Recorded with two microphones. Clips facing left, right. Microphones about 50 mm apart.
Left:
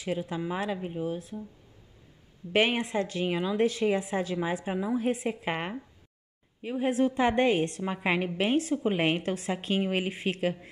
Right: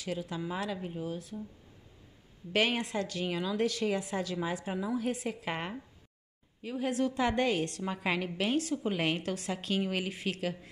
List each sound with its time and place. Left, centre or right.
0.0 s a woman's voice: left
2.5 s a woman's voice: left